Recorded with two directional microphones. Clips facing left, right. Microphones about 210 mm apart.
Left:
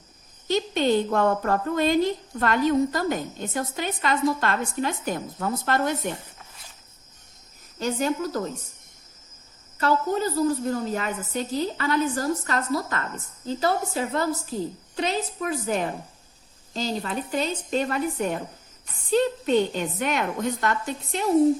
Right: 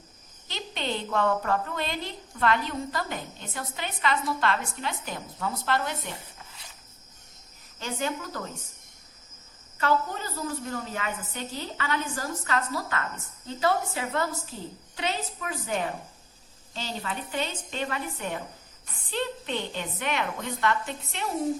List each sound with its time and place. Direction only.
0.4 s a woman's voice: 45° left (ahead or behind)
7.8 s a woman's voice: 40° left (ahead or behind)
9.7 s a woman's voice: 40° left (ahead or behind)